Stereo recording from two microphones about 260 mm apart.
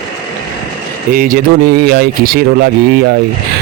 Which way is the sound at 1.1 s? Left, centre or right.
Right.